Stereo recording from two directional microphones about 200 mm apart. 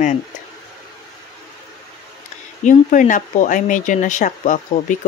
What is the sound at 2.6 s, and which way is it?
Speech, 40° left (ahead or behind).